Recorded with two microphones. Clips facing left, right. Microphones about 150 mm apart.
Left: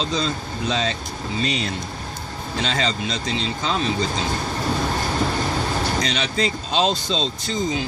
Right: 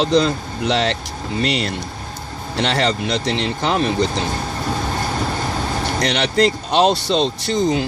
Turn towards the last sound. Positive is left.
turn(degrees=-70)  # may be behind; listen again after turning